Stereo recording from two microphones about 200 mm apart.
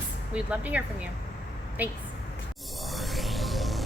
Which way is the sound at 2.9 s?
Centre (ahead or behind).